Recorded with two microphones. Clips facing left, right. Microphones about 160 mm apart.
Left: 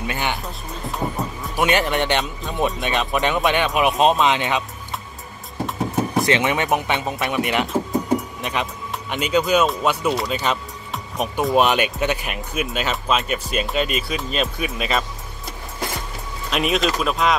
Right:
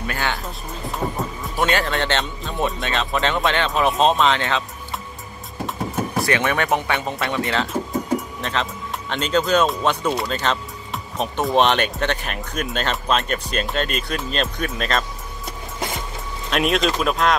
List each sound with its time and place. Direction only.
0.0 s speech: 20° left (ahead or behind)
0.8 s speech: centre (ahead or behind)
1.6 s speech: 20° left (ahead or behind)
6.2 s speech: 20° left (ahead or behind)
7.9 s a sound: 15° left (ahead or behind)
9.1 s speech: 10° left (ahead or behind)
16.4 s speech: centre (ahead or behind)